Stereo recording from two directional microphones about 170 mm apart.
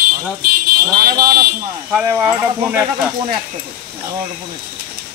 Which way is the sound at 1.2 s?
65° right (ahead or behind).